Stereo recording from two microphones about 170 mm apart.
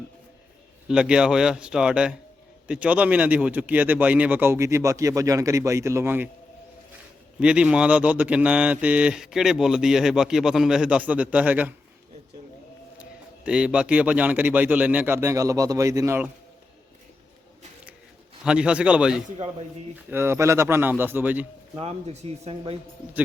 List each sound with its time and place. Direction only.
0.9 s a man's voice: 5° right (ahead or behind)
7.3 s speech: 5° right (ahead or behind)
13.0 s speech: 5° right (ahead or behind)
18.4 s a man's voice: 5° right (ahead or behind)
21.8 s speech: 40° right (ahead or behind)